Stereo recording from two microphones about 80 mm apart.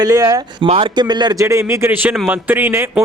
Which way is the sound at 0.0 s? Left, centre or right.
Right.